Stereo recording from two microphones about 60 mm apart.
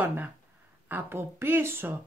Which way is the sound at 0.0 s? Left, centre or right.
Right.